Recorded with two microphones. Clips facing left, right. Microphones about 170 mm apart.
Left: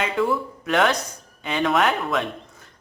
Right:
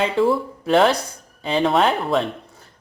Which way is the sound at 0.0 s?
30° right (ahead or behind).